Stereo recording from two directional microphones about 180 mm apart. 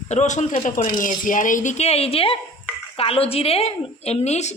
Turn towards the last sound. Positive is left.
turn(degrees=40)  # may be behind; listen again after turning